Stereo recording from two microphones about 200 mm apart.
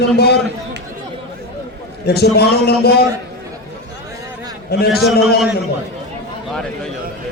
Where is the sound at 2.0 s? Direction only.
55° left (ahead or behind).